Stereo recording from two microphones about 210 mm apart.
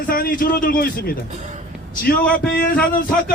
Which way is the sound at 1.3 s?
35° right (ahead or behind).